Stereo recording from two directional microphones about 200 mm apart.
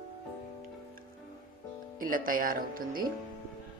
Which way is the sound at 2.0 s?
45° right (ahead or behind).